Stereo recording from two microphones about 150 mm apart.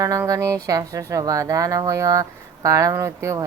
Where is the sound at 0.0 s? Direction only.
25° right (ahead or behind).